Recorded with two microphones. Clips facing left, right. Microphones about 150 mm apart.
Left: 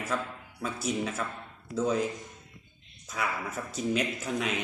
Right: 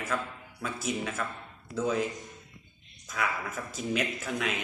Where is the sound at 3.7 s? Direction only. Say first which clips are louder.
Left 2 dB; centre (ahead or behind).